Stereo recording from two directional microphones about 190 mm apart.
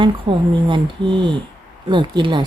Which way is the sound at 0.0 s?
25° right (ahead or behind).